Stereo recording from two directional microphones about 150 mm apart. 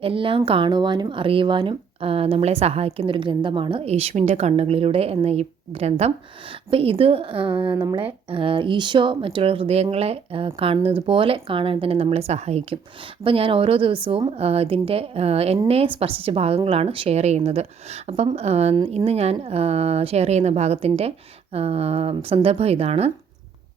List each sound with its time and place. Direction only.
0.0 s speech: 35° right (ahead or behind)